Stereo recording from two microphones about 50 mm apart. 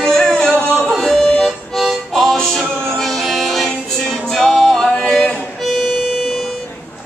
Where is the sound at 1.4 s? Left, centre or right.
Centre.